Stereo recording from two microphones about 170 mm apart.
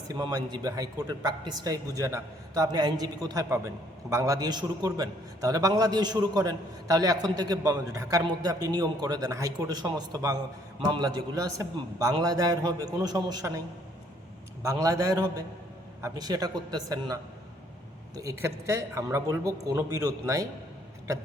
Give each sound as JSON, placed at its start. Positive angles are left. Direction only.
{"t": 0.1, "sound": "a man's voice", "side_deg": -20}
{"t": 14.6, "sound": "a man's voice", "side_deg": -20}